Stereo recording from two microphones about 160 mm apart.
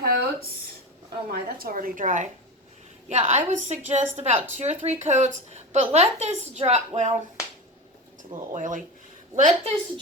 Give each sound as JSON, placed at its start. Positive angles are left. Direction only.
{"t": 0.0, "sound": "a sound", "side_deg": -75}
{"t": 1.3, "sound": "a woman's voice", "side_deg": -65}
{"t": 8.5, "sound": "a woman's voice", "side_deg": -55}